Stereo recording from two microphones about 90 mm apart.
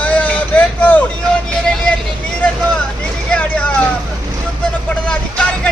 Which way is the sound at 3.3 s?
15° left (ahead or behind).